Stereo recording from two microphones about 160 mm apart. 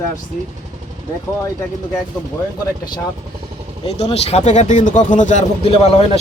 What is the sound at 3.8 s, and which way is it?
Speech, 40° left (ahead or behind).